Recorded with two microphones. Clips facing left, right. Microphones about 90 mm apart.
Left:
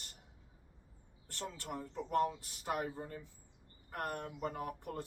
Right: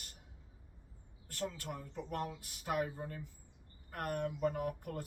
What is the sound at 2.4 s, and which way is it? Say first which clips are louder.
Speech: right 1 dB; 35° left (ahead or behind).